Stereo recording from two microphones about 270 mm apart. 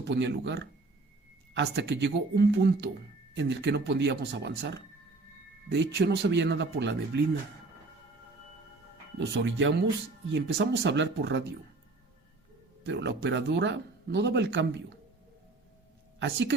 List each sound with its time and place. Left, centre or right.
0.0 s speech: right
9.1 s speech: right
12.8 s speech: right